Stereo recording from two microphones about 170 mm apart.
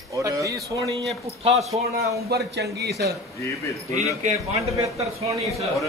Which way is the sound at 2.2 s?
70° right (ahead or behind).